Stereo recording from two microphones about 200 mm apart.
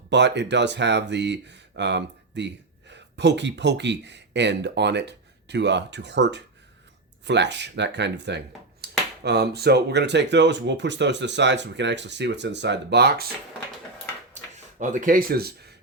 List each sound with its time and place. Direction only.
0.1 s speech: 60° right (ahead or behind)
14.4 s a sound: 35° right (ahead or behind)
14.8 s speech: 40° right (ahead or behind)